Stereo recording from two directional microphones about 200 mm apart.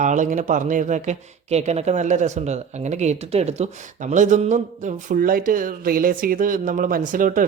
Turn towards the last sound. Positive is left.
turn(degrees=-40)  # may be behind; listen again after turning